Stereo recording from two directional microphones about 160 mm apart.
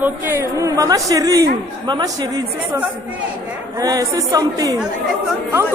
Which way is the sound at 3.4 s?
20° right (ahead or behind).